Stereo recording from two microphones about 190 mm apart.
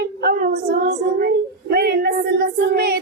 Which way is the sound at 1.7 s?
55° right (ahead or behind).